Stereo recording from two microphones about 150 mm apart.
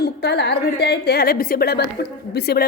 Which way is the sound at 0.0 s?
90° left.